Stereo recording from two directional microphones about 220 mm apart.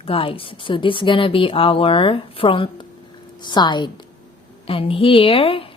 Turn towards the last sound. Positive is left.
turn(degrees=25)  # may be behind; listen again after turning